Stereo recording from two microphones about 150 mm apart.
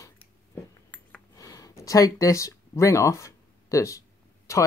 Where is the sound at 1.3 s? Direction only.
25° left (ahead or behind).